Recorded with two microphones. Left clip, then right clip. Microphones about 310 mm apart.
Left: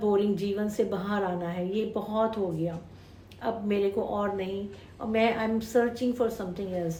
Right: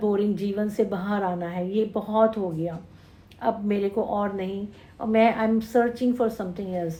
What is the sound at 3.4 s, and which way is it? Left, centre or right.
A woman's voice, centre.